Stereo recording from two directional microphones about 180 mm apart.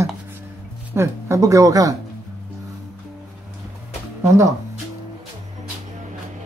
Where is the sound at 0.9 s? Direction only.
15° right (ahead or behind).